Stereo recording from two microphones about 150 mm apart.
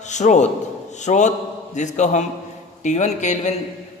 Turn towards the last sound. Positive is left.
turn(degrees=50)  # may be behind; listen again after turning